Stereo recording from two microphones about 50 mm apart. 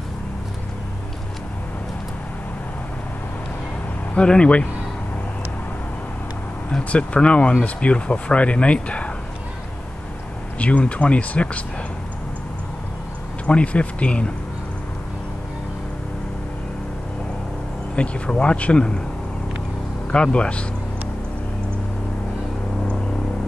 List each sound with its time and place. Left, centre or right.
4.1 s speech: centre
6.8 s speech: left
10.6 s speech: left
13.5 s speech: left
17.9 s speech: left
20.1 s speech: left